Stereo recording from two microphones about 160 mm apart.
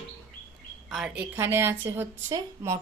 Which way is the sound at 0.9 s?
5° right (ahead or behind).